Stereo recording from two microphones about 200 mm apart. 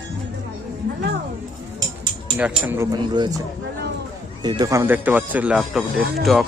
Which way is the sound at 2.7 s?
15° right (ahead or behind).